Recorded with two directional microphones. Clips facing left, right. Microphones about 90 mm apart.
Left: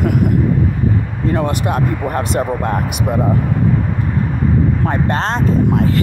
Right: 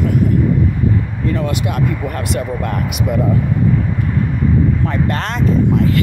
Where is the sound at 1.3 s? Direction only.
40° left (ahead or behind).